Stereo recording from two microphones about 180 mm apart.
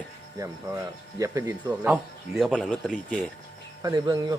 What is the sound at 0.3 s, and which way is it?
Speech, 15° right (ahead or behind).